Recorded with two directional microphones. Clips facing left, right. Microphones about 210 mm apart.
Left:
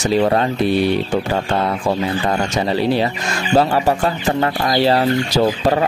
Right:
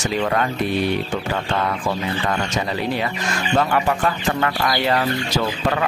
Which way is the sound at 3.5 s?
30° left (ahead or behind).